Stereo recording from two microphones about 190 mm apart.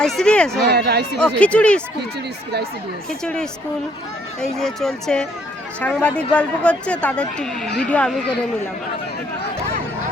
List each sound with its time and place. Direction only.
0.0 s speech: 5° left (ahead or behind)
0.7 s speech: 60° right (ahead or behind)
1.4 s speech: 5° left (ahead or behind)
3.1 s speech: 5° left (ahead or behind)